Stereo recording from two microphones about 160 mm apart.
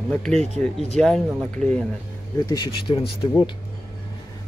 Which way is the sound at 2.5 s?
30° left (ahead or behind).